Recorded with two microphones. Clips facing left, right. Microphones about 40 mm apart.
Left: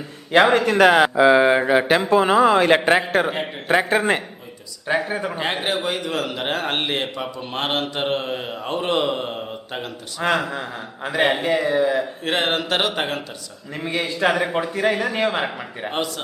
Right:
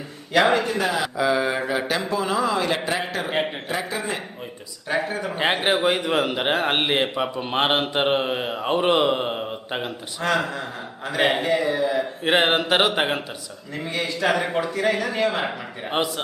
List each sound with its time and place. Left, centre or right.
0.3 s speech: left
0.6 s speech: left
1.1 s speech: left
5.0 s speech: left
5.6 s mantra: centre
10.2 s speech: centre
11.1 s a man's voice: centre
12.2 s mantra: centre
13.7 s speech: left
14.3 s speech: centre
14.5 s speech: centre
15.9 s mantra: centre